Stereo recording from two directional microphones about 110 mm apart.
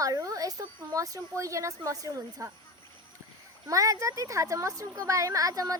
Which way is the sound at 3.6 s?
30° right (ahead or behind).